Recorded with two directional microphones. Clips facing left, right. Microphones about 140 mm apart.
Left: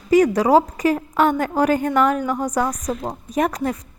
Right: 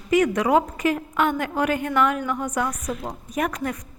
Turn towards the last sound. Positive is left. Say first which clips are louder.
# left 5 dB
turn(degrees=35)  # may be behind; listen again after turning